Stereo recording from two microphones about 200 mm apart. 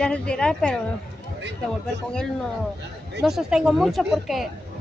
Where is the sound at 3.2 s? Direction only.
5° right (ahead or behind).